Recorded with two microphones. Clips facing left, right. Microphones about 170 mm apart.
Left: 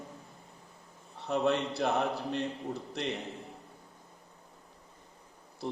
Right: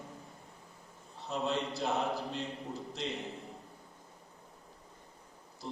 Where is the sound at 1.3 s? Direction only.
65° left (ahead or behind).